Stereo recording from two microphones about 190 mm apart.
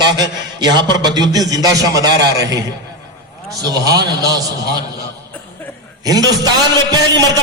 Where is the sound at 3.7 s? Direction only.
20° right (ahead or behind).